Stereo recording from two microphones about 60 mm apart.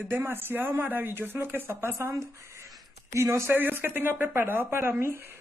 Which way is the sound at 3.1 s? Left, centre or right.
Right.